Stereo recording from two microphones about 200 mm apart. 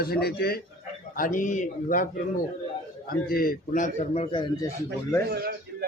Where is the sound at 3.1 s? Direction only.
45° left (ahead or behind); by 4.6 s 25° left (ahead or behind).